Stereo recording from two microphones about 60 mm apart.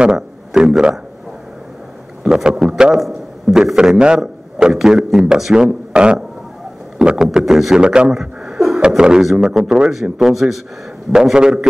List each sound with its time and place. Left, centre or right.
0.6 s speech: centre
2.2 s a man's voice: centre
3.9 s a man's voice: centre